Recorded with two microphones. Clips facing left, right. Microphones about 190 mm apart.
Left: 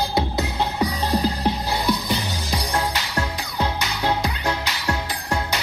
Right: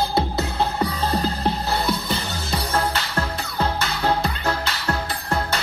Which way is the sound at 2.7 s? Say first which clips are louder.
Right 2 dB; 15° left (ahead or behind).